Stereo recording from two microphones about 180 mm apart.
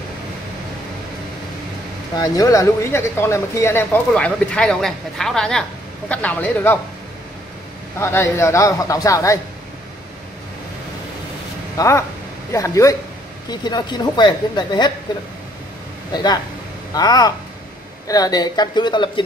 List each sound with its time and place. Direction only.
2.1 s speech: 20° left (ahead or behind)
8.0 s speech: 15° left (ahead or behind)
11.7 s a woman's voice: 15° left (ahead or behind)
16.1 s a woman's voice: 20° left (ahead or behind)